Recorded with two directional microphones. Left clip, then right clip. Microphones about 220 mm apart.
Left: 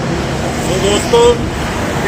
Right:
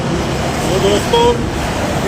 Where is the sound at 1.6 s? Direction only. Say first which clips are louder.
Even; 50° right (ahead or behind).